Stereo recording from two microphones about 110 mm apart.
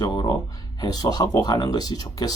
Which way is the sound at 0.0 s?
40° left (ahead or behind).